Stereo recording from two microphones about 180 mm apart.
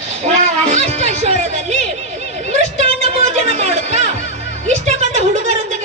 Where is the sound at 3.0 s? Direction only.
35° right (ahead or behind).